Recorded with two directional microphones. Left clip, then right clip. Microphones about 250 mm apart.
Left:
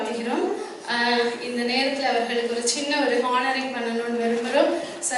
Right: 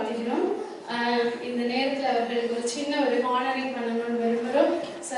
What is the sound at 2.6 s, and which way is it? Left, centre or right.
Speech, centre.